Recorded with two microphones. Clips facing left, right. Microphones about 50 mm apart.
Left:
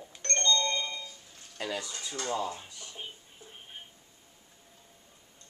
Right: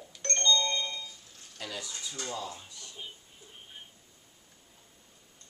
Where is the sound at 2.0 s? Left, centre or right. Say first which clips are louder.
Left 5 dB; left.